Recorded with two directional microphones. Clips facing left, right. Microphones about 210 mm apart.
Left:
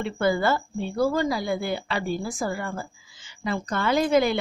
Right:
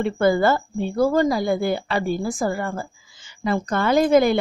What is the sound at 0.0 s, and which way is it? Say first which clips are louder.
Speech: right 5 dB; 45° right (ahead or behind).